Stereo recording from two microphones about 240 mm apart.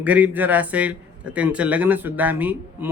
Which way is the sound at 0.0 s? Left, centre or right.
Centre.